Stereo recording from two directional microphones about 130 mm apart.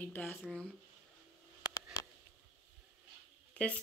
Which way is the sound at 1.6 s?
25° left (ahead or behind).